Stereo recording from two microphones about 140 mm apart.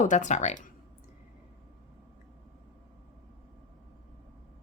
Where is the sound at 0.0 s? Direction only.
60° left (ahead or behind).